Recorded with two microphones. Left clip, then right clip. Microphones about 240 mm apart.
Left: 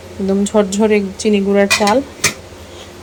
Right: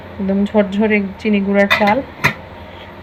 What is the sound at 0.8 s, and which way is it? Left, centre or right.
Speech, left.